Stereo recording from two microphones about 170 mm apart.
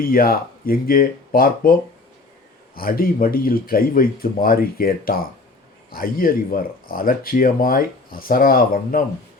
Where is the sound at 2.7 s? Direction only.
60° left (ahead or behind).